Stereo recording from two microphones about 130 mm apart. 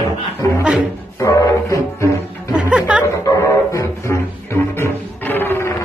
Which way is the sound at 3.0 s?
25° left (ahead or behind).